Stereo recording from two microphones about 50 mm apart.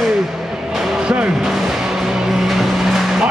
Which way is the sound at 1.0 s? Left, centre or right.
Centre.